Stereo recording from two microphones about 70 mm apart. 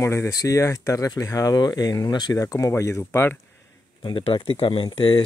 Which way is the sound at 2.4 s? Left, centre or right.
Left.